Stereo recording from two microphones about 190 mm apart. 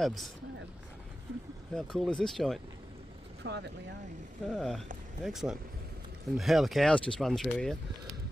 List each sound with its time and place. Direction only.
0.0 s speech: centre (ahead or behind)
1.7 s speech: centre (ahead or behind)
3.4 s speech: 60° right (ahead or behind)
4.5 s speech: centre (ahead or behind)